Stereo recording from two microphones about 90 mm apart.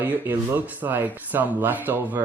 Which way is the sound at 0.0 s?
20° right (ahead or behind).